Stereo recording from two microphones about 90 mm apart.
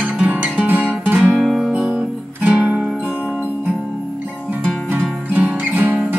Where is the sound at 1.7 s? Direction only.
10° right (ahead or behind).